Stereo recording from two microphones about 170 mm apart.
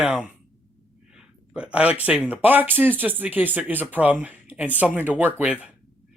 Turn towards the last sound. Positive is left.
turn(degrees=-10)  # may be behind; listen again after turning